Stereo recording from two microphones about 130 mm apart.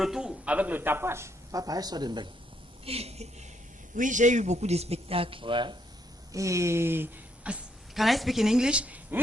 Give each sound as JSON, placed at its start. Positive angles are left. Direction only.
{"t": 0.0, "sound": "speech", "side_deg": -5}
{"t": 2.8, "sound": "a man's voice", "side_deg": -50}
{"t": 3.9, "sound": "a man's voice", "side_deg": -80}
{"t": 6.3, "sound": "speech", "side_deg": -25}